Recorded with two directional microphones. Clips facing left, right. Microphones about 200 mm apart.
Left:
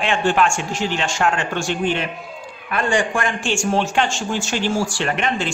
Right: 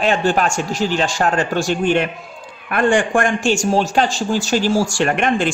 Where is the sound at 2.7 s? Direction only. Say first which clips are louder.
Right 5 dB; 55° right (ahead or behind).